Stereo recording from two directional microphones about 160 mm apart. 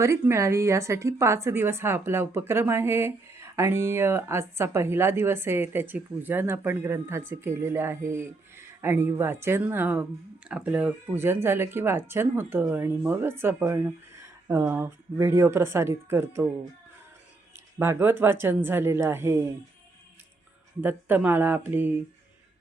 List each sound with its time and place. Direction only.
0.0 s a woman's voice: 15° right (ahead or behind)
17.7 s a woman's voice: 15° right (ahead or behind)
20.8 s a woman's voice: 10° right (ahead or behind)